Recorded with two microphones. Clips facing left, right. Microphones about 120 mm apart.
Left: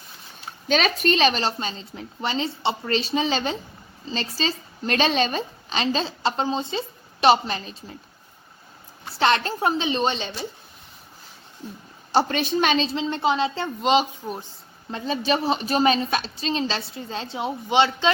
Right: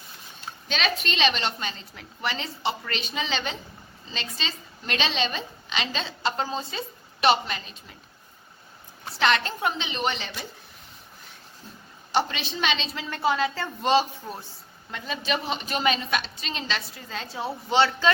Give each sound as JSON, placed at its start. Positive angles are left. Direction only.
{"t": 0.7, "sound": "a woman's voice", "side_deg": 45}
{"t": 9.1, "sound": "a woman's voice", "side_deg": 35}
{"t": 12.1, "sound": "a woman's voice", "side_deg": 45}
{"t": 12.9, "sound": "a woman's voice", "side_deg": 25}
{"t": 14.8, "sound": "a woman's voice", "side_deg": 35}